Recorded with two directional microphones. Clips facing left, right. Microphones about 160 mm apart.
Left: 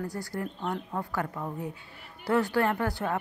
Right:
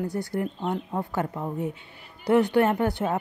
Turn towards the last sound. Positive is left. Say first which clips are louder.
# right 4 dB
turn(degrees=-20)  # may be behind; listen again after turning